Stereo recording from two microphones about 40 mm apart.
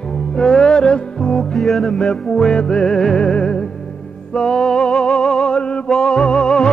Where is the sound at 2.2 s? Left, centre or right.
Centre.